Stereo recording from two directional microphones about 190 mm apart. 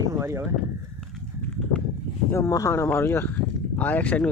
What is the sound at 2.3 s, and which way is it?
Speech, 15° left (ahead or behind).